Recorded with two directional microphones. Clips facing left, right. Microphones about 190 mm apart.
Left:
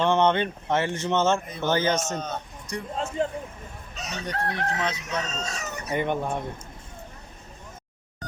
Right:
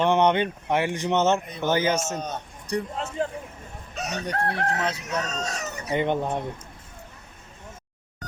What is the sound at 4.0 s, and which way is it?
Chicken, 55° right (ahead or behind).